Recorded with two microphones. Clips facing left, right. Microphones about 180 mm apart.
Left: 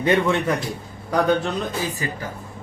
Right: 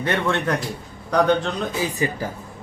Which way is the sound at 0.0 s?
15° left (ahead or behind).